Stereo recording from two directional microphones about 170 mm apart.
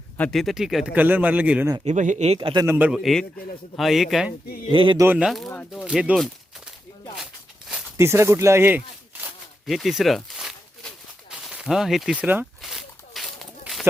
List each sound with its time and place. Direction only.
0.2 s speech: centre (ahead or behind)
1.8 s speech: 45° right (ahead or behind); by 2.6 s 30° right (ahead or behind)
2.6 s speech: 10° right (ahead or behind)
4.7 s speech: 30° right (ahead or behind)
5.1 s speech: centre (ahead or behind)
7.9 s speech: 15° right (ahead or behind)
9.6 s a sound: centre (ahead or behind)
12.6 s zipper: centre (ahead or behind)